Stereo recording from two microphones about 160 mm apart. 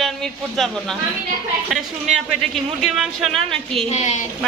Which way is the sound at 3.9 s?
45° left (ahead or behind).